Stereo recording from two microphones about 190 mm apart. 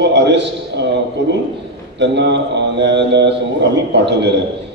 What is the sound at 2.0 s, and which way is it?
Speech, 65° right (ahead or behind).